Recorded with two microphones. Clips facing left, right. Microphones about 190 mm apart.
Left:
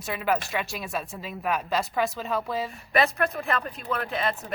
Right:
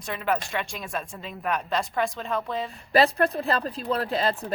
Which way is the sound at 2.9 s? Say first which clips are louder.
Right 4 dB; 30° right (ahead or behind).